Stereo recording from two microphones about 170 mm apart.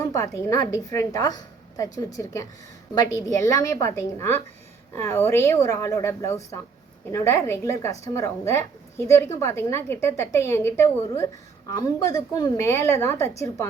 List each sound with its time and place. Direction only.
0.0 s a woman's voice: 15° left (ahead or behind)